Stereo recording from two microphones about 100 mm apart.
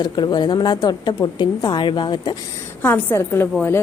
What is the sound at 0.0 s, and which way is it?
A woman's voice, 45° left (ahead or behind).